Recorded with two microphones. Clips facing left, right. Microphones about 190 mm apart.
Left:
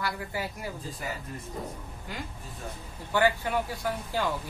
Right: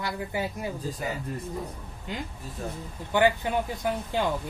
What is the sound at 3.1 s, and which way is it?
Speech, 20° right (ahead or behind).